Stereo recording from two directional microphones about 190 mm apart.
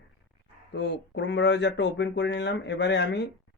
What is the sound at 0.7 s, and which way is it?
Speech, 65° left (ahead or behind).